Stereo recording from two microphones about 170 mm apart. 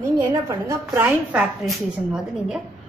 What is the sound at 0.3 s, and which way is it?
A woman's voice, 15° right (ahead or behind).